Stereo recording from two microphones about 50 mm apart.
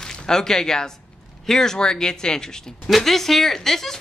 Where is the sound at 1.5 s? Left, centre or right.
Centre.